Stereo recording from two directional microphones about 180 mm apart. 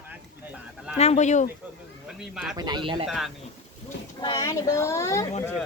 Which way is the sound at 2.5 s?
25° right (ahead or behind).